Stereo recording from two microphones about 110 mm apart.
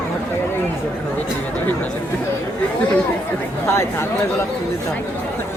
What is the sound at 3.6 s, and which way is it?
Speech, 25° left (ahead or behind).